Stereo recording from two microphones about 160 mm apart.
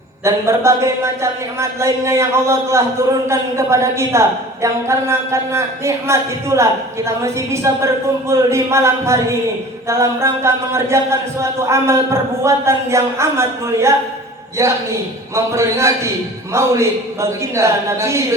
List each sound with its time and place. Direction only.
0.3 s a woman's voice: 20° right (ahead or behind)
16.5 s a woman's voice: 15° right (ahead or behind)